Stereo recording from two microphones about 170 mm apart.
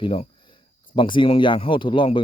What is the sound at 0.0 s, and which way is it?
Speech, 30° left (ahead or behind).